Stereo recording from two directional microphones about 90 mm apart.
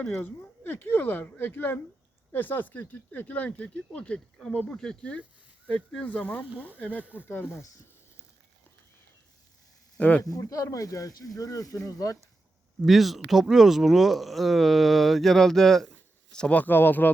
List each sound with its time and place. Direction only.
0.1 s speech: 25° left (ahead or behind)
10.0 s speech: 15° left (ahead or behind)
10.3 s speech: 40° left (ahead or behind)
12.8 s speech: centre (ahead or behind); by 17.1 s 20° left (ahead or behind)